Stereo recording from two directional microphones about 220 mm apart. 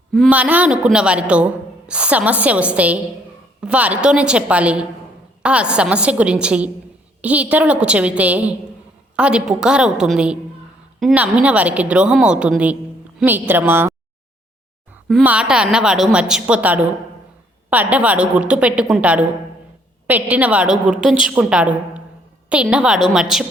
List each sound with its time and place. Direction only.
0.1 s a man's voice: centre (ahead or behind)
15.0 s a man's voice: 5° right (ahead or behind)
20.3 s a man's voice: 5° right (ahead or behind)